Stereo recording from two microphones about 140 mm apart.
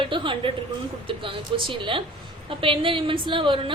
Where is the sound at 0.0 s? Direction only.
35° right (ahead or behind).